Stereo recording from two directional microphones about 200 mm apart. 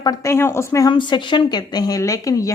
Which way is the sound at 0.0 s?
15° left (ahead or behind).